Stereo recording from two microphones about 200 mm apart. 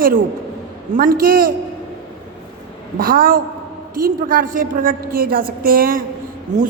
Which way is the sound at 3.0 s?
45° right (ahead or behind).